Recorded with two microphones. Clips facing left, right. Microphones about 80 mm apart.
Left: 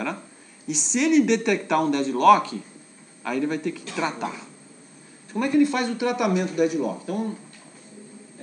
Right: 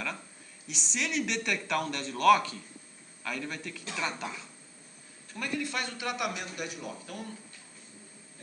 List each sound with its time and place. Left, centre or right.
0.7 s a man's voice: centre; by 7.3 s left